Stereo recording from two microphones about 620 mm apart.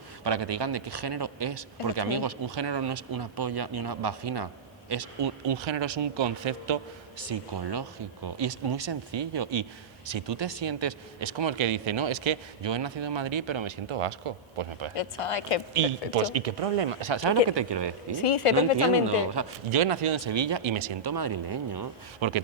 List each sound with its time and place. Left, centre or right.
0.3 s speech: right
7.5 s speech: right
14.9 s speech: left
15.7 s speech: right
17.0 s speech: right
18.1 s speech: left
19.3 s speech: right
19.8 s speech: right
21.0 s speech: right